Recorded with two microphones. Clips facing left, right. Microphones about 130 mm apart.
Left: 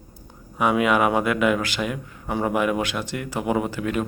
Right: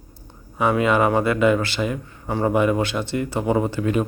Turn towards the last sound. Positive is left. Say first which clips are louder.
# right 3 dB
turn(degrees=0)  # may be behind; listen again after turning